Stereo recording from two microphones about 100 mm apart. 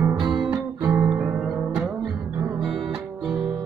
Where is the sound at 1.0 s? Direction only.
5° right (ahead or behind).